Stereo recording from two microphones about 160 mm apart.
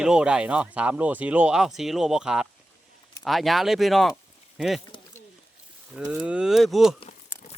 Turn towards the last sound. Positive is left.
turn(degrees=0)  # may be behind; listen again after turning